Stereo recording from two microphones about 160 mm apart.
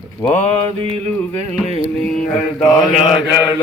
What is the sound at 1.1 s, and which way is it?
Music, 5° left (ahead or behind).